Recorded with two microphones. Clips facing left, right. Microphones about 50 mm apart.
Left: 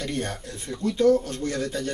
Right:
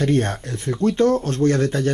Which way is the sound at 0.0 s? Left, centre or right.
Right.